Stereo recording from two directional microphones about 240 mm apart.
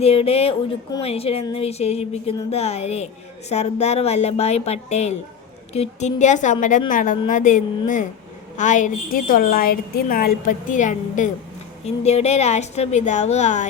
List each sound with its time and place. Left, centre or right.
0.0 s a woman's voice: left